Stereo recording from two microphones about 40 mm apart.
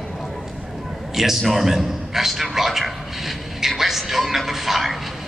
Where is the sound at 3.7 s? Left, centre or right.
Centre.